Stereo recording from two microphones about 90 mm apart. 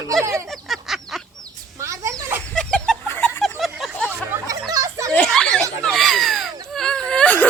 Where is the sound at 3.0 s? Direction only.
25° left (ahead or behind).